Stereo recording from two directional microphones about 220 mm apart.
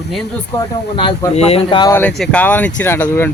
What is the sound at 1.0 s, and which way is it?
Speech, 25° left (ahead or behind).